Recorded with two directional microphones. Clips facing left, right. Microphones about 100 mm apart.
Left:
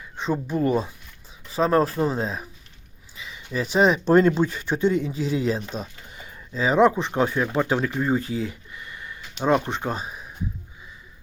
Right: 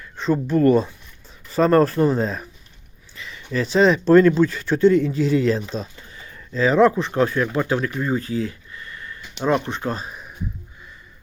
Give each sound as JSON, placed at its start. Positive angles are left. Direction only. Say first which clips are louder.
{"t": 0.0, "sound": "a sound", "louder": "right 5 dB", "side_deg": 15}
{"t": 0.4, "sound": "speech", "louder": "right 8 dB", "side_deg": 10}
{"t": 6.1, "sound": "speech", "louder": "right 2 dB", "side_deg": 20}
{"t": 9.9, "sound": "speech", "louder": "right 1 dB", "side_deg": 10}